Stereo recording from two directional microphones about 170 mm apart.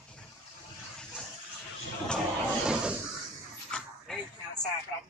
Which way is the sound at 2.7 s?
5° right (ahead or behind).